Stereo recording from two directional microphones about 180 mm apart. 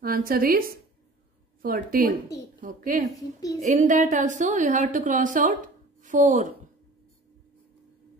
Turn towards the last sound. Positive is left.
turn(degrees=-45)  # may be behind; listen again after turning